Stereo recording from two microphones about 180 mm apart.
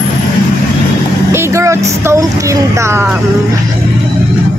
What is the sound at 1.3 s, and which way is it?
Speech, 15° right (ahead or behind).